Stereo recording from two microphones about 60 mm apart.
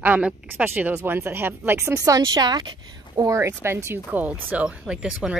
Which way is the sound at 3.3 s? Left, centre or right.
Right.